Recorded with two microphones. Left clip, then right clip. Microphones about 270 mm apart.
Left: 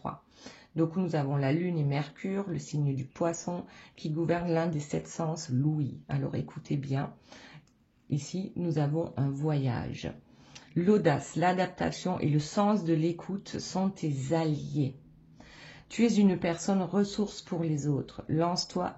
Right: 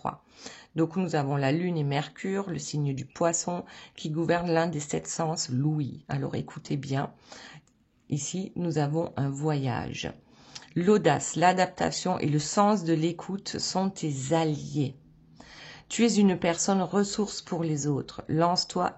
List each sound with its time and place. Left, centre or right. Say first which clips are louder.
0.0 s speech: right 5 dB; right
8.1 s speech: right 3 dB; right